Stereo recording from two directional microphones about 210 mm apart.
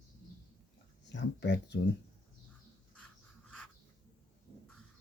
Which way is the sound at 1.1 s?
55° left (ahead or behind).